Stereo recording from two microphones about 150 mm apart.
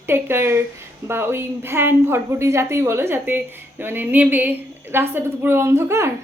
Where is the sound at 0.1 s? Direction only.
15° right (ahead or behind).